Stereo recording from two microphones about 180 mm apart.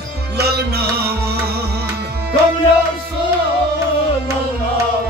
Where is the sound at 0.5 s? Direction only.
60° right (ahead or behind).